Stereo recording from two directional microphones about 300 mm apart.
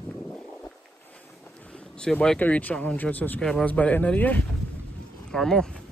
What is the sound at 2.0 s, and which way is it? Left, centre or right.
Speech, centre.